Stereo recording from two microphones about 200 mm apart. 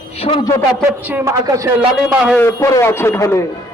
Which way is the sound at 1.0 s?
10° right (ahead or behind).